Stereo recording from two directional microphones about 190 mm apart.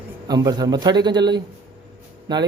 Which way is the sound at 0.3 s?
20° right (ahead or behind).